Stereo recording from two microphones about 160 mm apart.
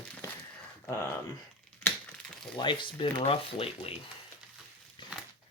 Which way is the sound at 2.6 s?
30° left (ahead or behind).